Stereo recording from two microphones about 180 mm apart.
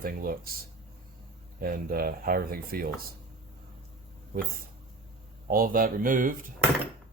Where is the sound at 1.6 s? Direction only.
55° right (ahead or behind).